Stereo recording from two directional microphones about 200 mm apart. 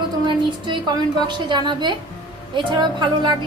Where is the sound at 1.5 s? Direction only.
20° right (ahead or behind).